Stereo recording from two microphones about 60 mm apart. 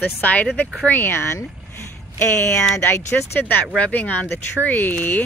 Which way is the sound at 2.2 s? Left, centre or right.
Left.